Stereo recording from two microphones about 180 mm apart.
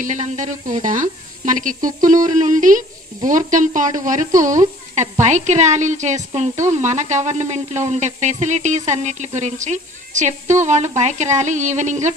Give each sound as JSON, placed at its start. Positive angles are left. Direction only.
{"t": 0.0, "sound": "speech", "side_deg": -45}